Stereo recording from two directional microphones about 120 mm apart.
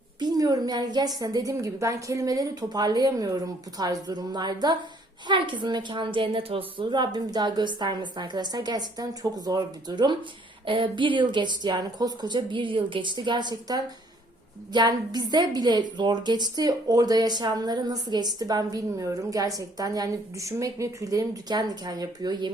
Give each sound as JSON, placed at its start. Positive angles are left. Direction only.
{"t": 0.2, "sound": "a woman's voice", "side_deg": -35}